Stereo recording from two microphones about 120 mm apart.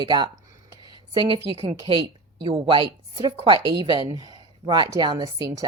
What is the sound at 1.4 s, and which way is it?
Speech, 60° right (ahead or behind).